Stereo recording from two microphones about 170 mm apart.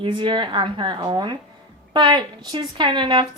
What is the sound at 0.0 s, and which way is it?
A woman's voice, 30° right (ahead or behind).